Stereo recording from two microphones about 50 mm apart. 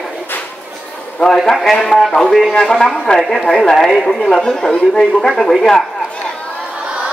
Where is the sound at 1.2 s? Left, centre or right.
Centre.